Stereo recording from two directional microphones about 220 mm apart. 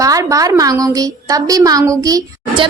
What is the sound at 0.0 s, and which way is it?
A woman's voice, 15° right (ahead or behind).